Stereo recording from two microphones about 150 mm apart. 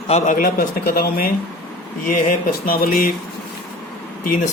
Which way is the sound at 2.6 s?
75° left (ahead or behind).